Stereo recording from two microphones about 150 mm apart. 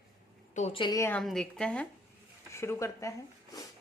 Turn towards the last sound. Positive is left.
turn(degrees=20)  # may be behind; listen again after turning